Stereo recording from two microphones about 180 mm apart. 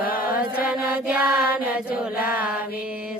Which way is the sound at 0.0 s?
55° left (ahead or behind).